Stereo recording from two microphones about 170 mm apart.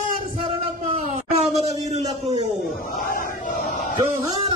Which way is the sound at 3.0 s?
60° left (ahead or behind).